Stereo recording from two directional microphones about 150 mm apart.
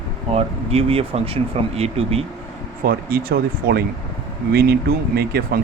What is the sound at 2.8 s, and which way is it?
Speech, 85° right.